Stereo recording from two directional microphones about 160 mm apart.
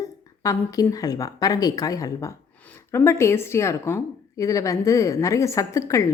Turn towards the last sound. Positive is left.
turn(degrees=20)  # may be behind; listen again after turning